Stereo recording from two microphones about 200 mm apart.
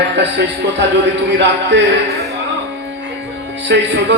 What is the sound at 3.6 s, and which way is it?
Speech, 60° right (ahead or behind).